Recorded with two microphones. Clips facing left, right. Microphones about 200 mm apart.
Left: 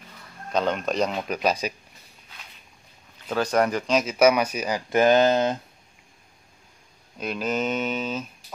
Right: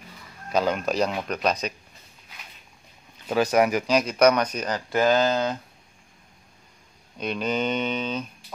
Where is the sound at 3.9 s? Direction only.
5° left (ahead or behind).